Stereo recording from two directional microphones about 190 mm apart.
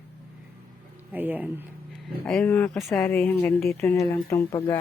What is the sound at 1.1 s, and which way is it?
Speech, 10° right (ahead or behind).